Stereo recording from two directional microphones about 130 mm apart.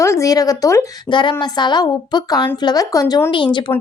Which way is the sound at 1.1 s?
40° left (ahead or behind).